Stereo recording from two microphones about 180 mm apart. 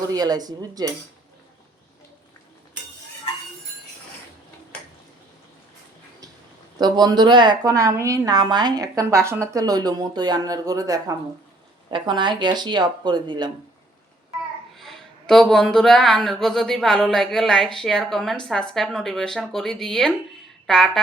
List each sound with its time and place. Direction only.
0.1 s a woman's voice: 20° right (ahead or behind)
6.7 s a woman's voice: 25° right (ahead or behind)
14.8 s speech: centre (ahead or behind)